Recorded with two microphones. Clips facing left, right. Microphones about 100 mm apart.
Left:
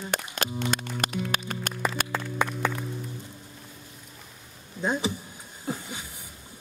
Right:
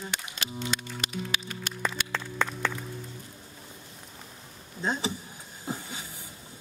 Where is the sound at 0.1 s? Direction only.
50° left (ahead or behind).